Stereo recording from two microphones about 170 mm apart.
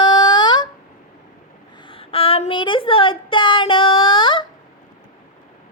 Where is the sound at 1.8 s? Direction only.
30° left (ahead or behind).